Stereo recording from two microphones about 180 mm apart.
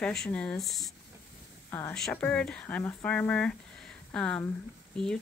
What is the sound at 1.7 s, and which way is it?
Speech, 15° left (ahead or behind).